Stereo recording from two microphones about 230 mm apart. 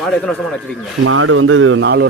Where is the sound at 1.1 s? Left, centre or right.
Right.